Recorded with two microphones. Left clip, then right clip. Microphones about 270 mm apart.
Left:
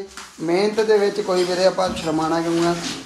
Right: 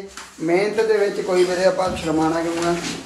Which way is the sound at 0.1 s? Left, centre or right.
Left.